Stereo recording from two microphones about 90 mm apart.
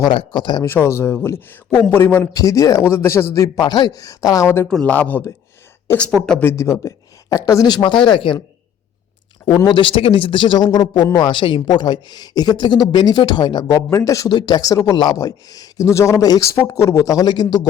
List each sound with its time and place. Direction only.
0.1 s speech: 75° left (ahead or behind)
0.3 s speech: 55° left (ahead or behind)
0.6 s a man's voice: 30° left (ahead or behind)
2.3 s speech: 40° left (ahead or behind)
2.8 s a man's voice: 25° left (ahead or behind)
3.3 s speech: 35° left (ahead or behind)
4.4 s a man's voice: 25° left (ahead or behind)
4.7 s speech: 15° left (ahead or behind)
6.4 s speech: 30° left (ahead or behind)
7.9 s speech: 65° left (ahead or behind)
9.6 s speech: 65° left (ahead or behind); by 11.3 s 50° left (ahead or behind)
11.3 s speech: 65° left (ahead or behind)
13.7 s speech: 35° left (ahead or behind)
14.3 s speech: 50° left (ahead or behind)